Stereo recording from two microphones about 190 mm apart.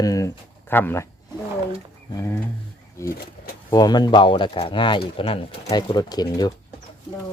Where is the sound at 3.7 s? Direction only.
20° left (ahead or behind).